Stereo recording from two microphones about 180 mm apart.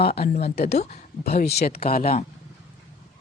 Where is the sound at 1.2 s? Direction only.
55° left (ahead or behind).